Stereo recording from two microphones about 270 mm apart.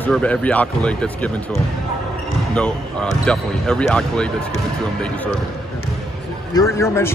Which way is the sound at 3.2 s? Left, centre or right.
Centre.